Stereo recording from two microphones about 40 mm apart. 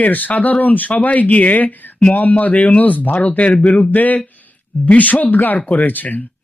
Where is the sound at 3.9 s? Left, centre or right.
Left.